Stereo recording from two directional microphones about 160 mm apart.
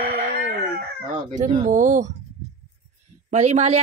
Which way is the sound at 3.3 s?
45° right (ahead or behind).